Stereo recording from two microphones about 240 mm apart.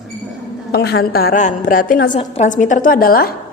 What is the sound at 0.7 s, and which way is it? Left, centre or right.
A woman's voice, left.